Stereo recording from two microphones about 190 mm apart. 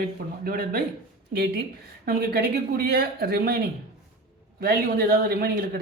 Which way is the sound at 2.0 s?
55° right (ahead or behind).